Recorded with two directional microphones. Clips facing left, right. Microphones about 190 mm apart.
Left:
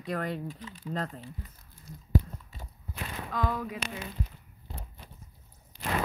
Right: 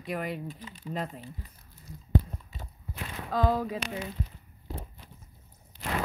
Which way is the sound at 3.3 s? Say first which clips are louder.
Right 6 dB; 35° right (ahead or behind).